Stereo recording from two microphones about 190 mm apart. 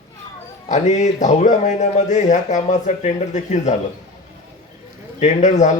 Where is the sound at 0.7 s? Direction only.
40° left (ahead or behind).